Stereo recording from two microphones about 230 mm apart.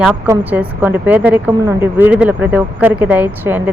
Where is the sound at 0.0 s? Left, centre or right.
Centre.